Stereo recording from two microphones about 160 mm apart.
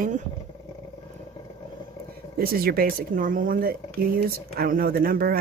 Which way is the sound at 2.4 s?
70° right (ahead or behind).